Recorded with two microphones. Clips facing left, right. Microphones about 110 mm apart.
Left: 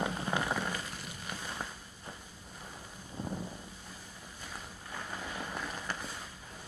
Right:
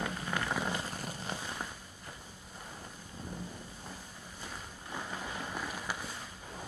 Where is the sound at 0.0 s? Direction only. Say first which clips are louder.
Left 3 dB; 20° left (ahead or behind).